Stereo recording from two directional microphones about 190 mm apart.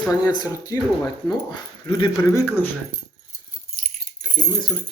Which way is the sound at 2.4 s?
10° left (ahead or behind).